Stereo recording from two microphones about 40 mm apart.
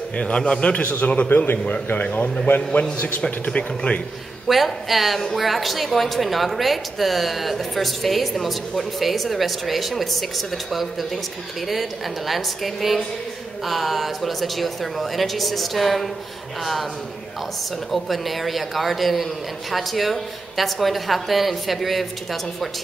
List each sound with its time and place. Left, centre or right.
0.2 s a man's voice: left
1.3 s speech: left
3.3 s speech: left
4.5 s a woman's voice: centre
17.9 s a woman's voice: centre